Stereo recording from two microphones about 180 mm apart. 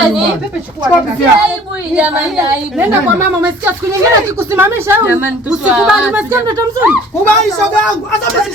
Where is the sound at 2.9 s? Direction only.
10° right (ahead or behind).